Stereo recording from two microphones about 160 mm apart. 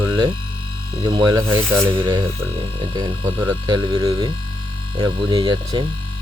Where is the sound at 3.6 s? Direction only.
25° right (ahead or behind).